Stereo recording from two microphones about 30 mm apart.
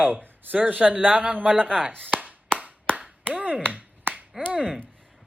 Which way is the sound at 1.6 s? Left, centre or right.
Left.